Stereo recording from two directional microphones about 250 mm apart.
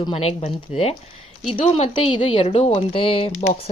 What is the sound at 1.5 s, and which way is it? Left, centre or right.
A woman's voice, left.